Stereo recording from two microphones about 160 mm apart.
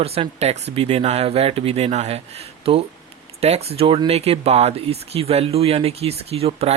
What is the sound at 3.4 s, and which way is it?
Speech, 40° right (ahead or behind).